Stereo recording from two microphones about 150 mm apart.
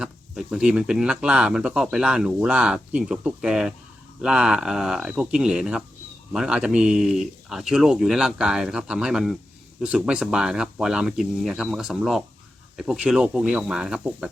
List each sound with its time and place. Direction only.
0.0 s speech: 5° right (ahead or behind)